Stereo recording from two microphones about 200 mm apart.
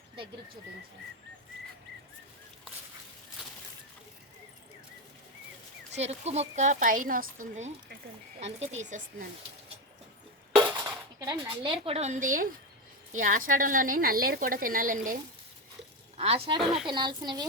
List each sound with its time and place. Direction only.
5.9 s speech: 30° right (ahead or behind)
11.3 s a woman's voice: 20° right (ahead or behind); by 15.2 s 40° right (ahead or behind)
16.1 s speech: 30° right (ahead or behind)
16.6 s speech: centre (ahead or behind)
16.8 s speech: 20° right (ahead or behind)